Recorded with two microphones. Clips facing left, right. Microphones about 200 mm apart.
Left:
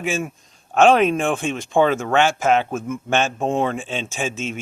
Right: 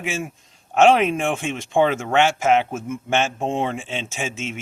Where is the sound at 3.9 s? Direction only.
25° right (ahead or behind).